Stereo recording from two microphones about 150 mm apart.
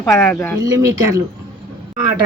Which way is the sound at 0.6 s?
25° right (ahead or behind).